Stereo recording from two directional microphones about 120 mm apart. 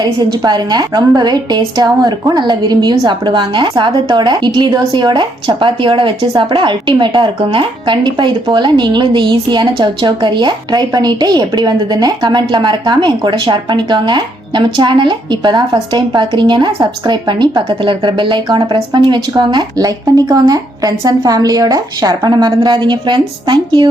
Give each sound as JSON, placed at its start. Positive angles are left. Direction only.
{"t": 0.0, "sound": "speech", "side_deg": -35}